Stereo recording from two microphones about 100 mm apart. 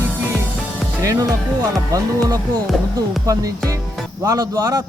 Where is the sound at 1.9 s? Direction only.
35° right (ahead or behind).